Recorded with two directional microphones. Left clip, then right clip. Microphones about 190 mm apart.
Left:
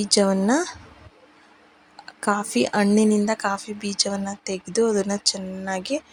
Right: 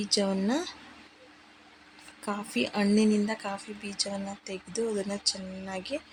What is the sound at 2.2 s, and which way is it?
A woman's voice, 30° left (ahead or behind).